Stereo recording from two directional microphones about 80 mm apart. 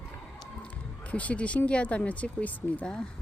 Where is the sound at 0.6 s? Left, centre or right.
Centre.